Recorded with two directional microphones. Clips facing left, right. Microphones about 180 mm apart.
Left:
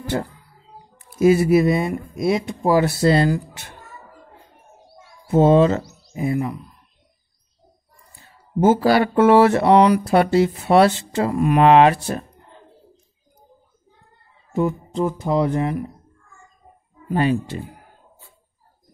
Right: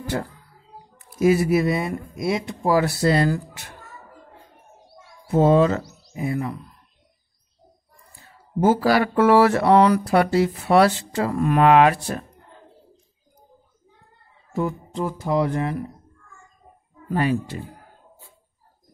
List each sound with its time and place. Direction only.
0.0 s speech: 30° left (ahead or behind)
5.3 s speech: 25° left (ahead or behind)
8.5 s speech: 25° left (ahead or behind)
14.5 s speech: 20° left (ahead or behind)
17.1 s speech: 25° left (ahead or behind)